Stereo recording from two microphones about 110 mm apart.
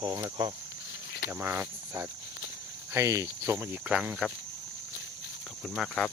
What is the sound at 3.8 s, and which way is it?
Speech, 15° right (ahead or behind).